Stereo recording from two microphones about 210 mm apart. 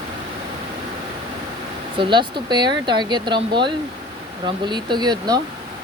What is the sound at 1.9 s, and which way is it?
Speech, 20° right (ahead or behind).